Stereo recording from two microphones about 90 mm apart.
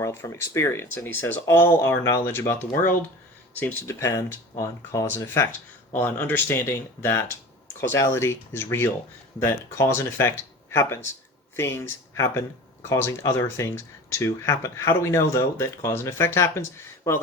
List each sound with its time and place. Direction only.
0.0 s speech: 35° left (ahead or behind)
3.8 s speech: 35° left (ahead or behind)